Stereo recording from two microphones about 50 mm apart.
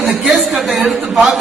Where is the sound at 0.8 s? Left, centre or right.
Centre.